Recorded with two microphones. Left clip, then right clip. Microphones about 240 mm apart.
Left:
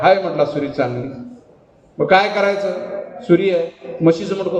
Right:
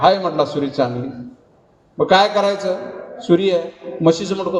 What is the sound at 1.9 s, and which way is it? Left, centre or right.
A man's voice, right.